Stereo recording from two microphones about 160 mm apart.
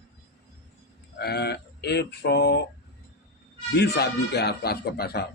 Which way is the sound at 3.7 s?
90° left.